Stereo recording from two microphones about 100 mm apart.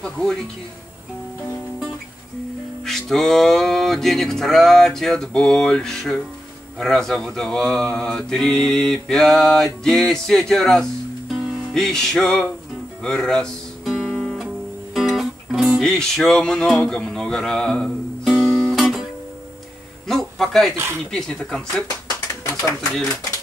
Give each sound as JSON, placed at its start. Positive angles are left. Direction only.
{"t": 0.0, "sound": "music", "side_deg": 5}
{"t": 2.8, "sound": "music", "side_deg": 5}
{"t": 13.0, "sound": "guitar", "side_deg": 5}
{"t": 15.0, "sound": "music", "side_deg": 0}
{"t": 20.1, "sound": "a man's voice", "side_deg": 0}
{"t": 20.7, "sound": "speech", "side_deg": -25}
{"t": 21.1, "sound": "speech", "side_deg": 5}